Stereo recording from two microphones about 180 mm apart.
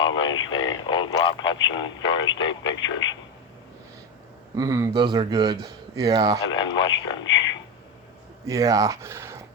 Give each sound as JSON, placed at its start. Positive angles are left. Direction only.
{"t": 0.0, "sound": "a sound", "side_deg": 25}
{"t": 0.5, "sound": "speech", "side_deg": 25}
{"t": 4.5, "sound": "speech", "side_deg": -20}
{"t": 6.5, "sound": "speech", "side_deg": 25}
{"t": 8.4, "sound": "speech", "side_deg": -20}